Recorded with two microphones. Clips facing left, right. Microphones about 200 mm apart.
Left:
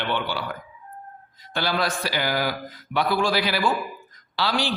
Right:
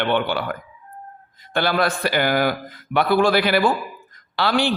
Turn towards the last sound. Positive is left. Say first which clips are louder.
# right 5 dB
turn(degrees=-55)  # may be behind; listen again after turning